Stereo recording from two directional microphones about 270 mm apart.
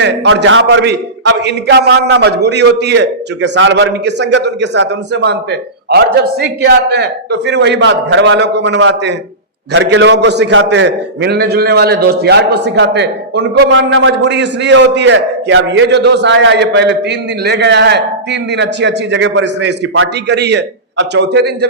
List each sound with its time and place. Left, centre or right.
0.0 s a man's voice: right